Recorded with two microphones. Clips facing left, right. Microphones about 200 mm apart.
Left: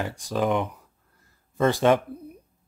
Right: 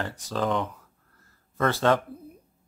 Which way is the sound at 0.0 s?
10° left (ahead or behind).